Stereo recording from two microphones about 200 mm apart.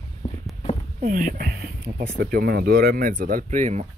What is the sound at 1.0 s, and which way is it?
Speech, 45° right (ahead or behind).